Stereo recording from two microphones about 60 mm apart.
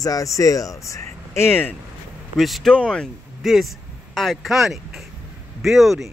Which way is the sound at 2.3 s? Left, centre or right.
Centre.